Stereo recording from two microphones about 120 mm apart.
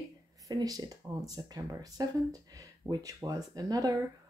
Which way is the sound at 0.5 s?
35° right (ahead or behind).